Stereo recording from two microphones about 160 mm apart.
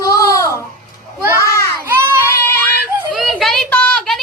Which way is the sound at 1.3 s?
20° left (ahead or behind).